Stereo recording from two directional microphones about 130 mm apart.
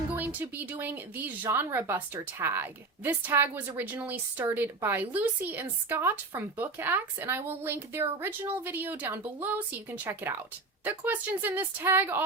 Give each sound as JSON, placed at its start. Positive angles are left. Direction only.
{"t": 0.2, "sound": "speech", "side_deg": -15}